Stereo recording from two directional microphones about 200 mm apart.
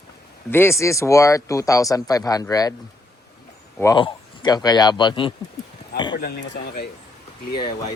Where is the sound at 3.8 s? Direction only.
20° left (ahead or behind).